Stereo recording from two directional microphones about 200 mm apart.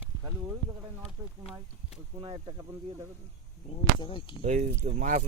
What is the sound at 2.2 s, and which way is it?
Speech, 25° right (ahead or behind).